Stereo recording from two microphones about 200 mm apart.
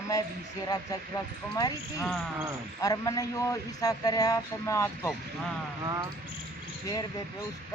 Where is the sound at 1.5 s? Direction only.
20° left (ahead or behind).